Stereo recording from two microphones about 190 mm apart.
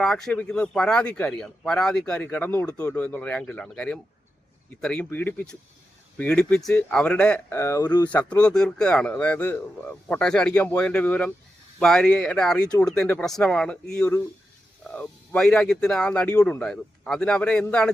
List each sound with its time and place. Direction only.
0.0 s a man's voice: 5° left (ahead or behind); by 8.1 s 20° left (ahead or behind)
8.1 s a man's voice: 5° left (ahead or behind)